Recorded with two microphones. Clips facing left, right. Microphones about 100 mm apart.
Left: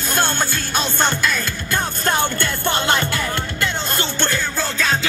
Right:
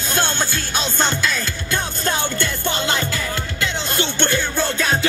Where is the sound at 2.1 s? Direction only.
55° left (ahead or behind).